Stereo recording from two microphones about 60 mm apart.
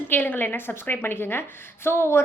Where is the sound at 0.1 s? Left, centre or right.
Left.